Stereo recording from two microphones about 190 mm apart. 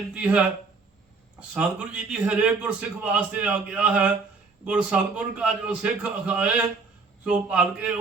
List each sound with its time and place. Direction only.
0.1 s a man's voice: 5° right (ahead or behind)